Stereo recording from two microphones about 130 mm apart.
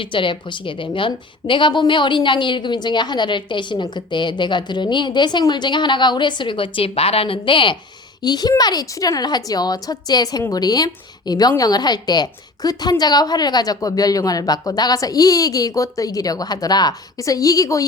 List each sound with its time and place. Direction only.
0.0 s a woman's voice: 40° left (ahead or behind)